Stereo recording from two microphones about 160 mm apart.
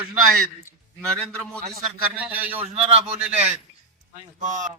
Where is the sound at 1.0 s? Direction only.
5° left (ahead or behind).